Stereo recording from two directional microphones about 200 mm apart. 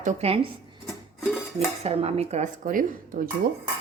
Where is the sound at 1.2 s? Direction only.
Centre (ahead or behind).